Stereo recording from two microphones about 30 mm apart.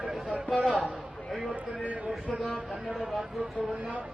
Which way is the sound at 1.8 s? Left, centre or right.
Right.